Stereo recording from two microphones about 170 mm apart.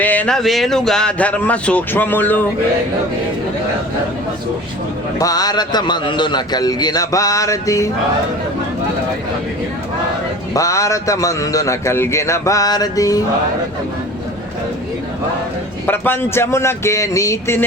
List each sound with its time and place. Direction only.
0.0 s speech: 10° left (ahead or behind)
5.2 s a man's voice: 20° left (ahead or behind)
10.5 s a man's voice: 20° left (ahead or behind)
15.9 s speech: 15° left (ahead or behind)